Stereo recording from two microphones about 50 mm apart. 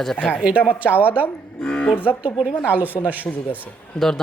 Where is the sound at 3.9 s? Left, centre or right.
Centre.